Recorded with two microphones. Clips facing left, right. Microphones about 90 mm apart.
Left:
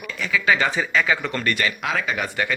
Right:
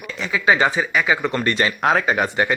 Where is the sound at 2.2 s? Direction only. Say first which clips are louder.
Right 5 dB; 25° right (ahead or behind).